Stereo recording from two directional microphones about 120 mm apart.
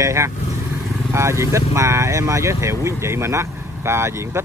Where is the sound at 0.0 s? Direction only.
25° right (ahead or behind).